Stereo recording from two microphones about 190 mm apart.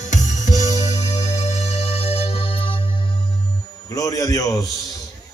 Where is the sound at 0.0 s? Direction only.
40° left (ahead or behind).